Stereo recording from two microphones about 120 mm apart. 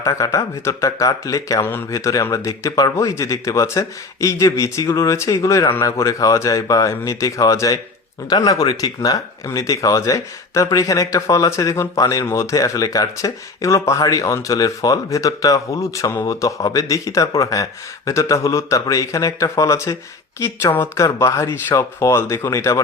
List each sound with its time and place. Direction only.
0.0 s speech: 25° left (ahead or behind)